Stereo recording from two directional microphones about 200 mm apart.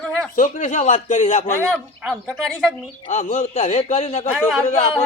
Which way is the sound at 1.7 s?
5° right (ahead or behind).